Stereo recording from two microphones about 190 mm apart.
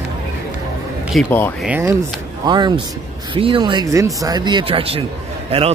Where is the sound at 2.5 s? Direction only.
25° right (ahead or behind).